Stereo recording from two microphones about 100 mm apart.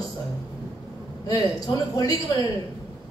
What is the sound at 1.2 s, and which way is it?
Speech, 35° left (ahead or behind).